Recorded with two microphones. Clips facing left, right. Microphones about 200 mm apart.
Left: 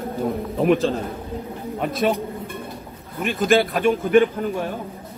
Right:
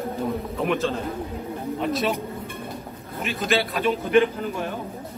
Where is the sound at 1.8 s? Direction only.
50° left (ahead or behind).